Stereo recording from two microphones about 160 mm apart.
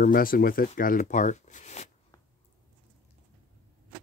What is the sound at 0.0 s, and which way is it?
Speech, 60° left (ahead or behind).